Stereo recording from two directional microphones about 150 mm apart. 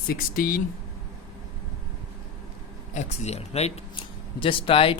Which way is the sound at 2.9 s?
45° left (ahead or behind).